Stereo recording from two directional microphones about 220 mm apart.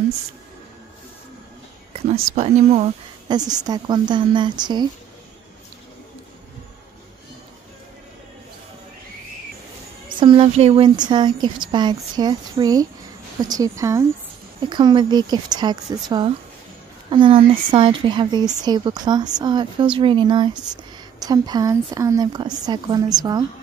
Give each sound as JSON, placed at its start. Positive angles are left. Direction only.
{"t": 2.0, "sound": "speech", "side_deg": -30}
{"t": 3.3, "sound": "speech", "side_deg": -15}
{"t": 10.0, "sound": "a woman's voice", "side_deg": -20}